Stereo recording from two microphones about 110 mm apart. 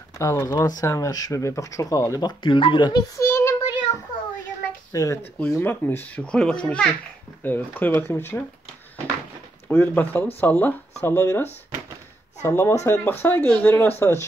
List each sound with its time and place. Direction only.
0.2 s speech: 25° left (ahead or behind); by 3.0 s 45° left (ahead or behind)
3.2 s child singing: 25° left (ahead or behind)
4.9 s speech: 30° left (ahead or behind)
5.5 s a child's voice: 20° left (ahead or behind)
9.7 s a child's voice: 15° left (ahead or behind)
12.4 s speech: 25° left (ahead or behind)